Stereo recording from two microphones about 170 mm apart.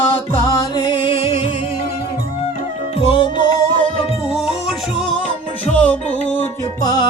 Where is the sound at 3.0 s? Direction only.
35° left (ahead or behind).